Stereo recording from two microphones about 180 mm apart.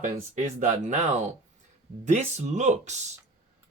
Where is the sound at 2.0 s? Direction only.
40° right (ahead or behind).